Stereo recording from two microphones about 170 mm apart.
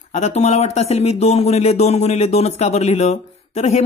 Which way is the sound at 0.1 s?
40° left (ahead or behind).